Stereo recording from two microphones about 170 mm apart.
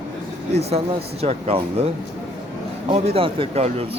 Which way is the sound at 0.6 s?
35° right (ahead or behind).